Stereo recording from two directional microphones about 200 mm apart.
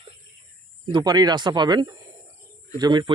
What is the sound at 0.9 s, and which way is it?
Speech, 20° right (ahead or behind).